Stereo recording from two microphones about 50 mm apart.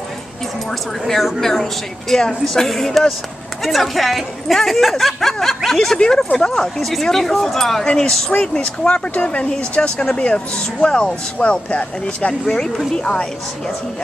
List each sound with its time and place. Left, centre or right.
1.0 s speech: centre
8.4 s speech: left
12.4 s speech: centre